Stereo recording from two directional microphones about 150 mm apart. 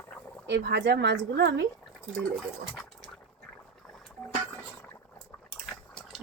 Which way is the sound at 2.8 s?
Centre (ahead or behind).